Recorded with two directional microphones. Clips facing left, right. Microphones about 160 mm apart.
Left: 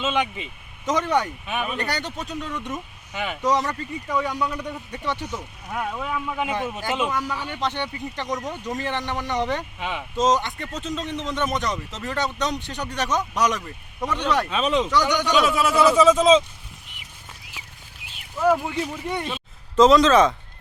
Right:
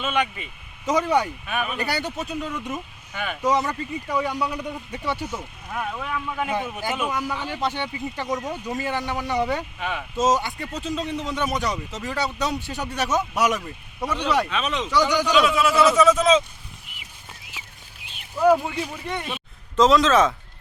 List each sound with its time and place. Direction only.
0.0 s speech: 20° left (ahead or behind)
0.9 s speech: 5° right (ahead or behind)
1.5 s speech: 15° left (ahead or behind)
1.7 s speech: 10° right (ahead or behind)
3.1 s speech: 15° left (ahead or behind)
3.4 s speech: 5° right (ahead or behind)
5.6 s speech: 10° left (ahead or behind)
6.5 s speech: 10° right (ahead or behind)
9.7 s speech: 15° left (ahead or behind)
10.2 s speech: 5° right (ahead or behind)
14.5 s speech: 30° left (ahead or behind)
14.8 s speech: centre (ahead or behind)
15.4 s speech: 35° left (ahead or behind)
18.3 s speech: 10° right (ahead or behind)